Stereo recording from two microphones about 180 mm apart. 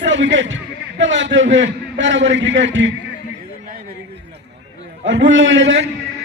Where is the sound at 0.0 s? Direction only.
90° right.